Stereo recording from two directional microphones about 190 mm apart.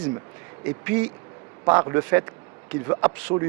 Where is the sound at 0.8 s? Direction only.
10° right (ahead or behind).